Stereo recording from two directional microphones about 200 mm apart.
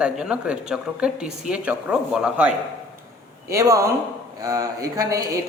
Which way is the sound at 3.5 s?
15° right (ahead or behind).